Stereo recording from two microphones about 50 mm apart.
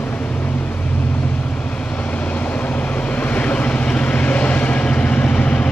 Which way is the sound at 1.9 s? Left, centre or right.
Left.